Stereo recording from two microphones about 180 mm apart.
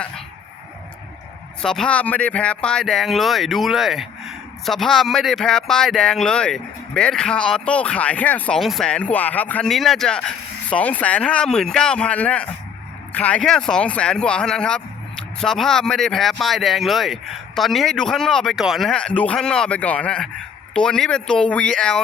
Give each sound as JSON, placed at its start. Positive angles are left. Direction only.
{"t": 1.6, "sound": "speech", "side_deg": 5}